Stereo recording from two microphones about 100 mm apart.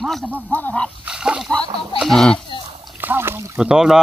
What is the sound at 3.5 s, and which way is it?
Speech, 5° right (ahead or behind).